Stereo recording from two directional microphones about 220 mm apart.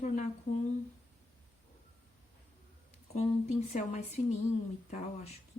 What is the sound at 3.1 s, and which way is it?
A woman's voice, 30° left (ahead or behind).